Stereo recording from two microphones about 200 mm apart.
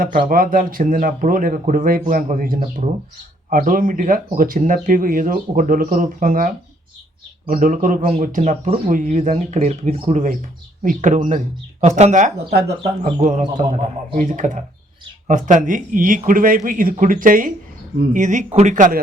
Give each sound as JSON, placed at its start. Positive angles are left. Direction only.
{"t": 0.0, "sound": "speech", "side_deg": -45}
{"t": 12.8, "sound": "speech", "side_deg": -25}
{"t": 13.2, "sound": "speech", "side_deg": -40}